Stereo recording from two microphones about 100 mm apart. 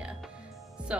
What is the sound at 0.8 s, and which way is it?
Music, 10° right (ahead or behind).